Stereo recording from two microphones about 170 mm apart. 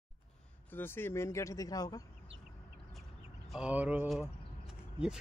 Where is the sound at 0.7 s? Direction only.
10° left (ahead or behind).